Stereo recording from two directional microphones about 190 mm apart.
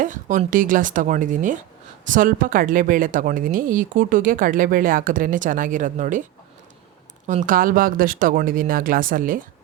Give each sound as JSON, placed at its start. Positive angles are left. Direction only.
{"t": 0.0, "sound": "speech", "side_deg": -40}
{"t": 7.3, "sound": "speech", "side_deg": -45}